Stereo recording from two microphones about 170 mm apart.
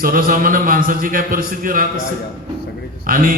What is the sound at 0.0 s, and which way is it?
A man's voice, 55° right (ahead or behind).